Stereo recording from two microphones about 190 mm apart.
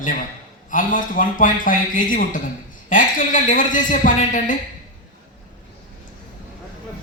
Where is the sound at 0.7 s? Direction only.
45° left (ahead or behind).